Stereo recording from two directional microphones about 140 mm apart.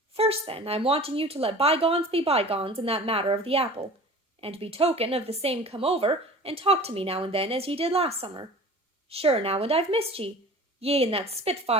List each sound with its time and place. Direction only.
0.1 s speech: 45° right (ahead or behind)